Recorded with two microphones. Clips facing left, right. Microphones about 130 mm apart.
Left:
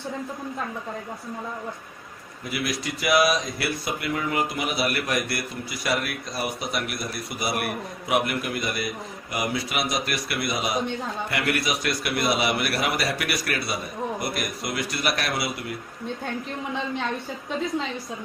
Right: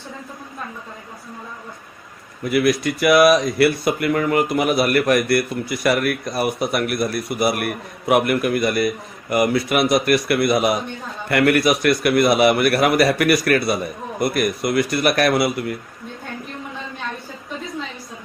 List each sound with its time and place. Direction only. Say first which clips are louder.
2.4 s speech: right 11 dB; 55° right (ahead or behind)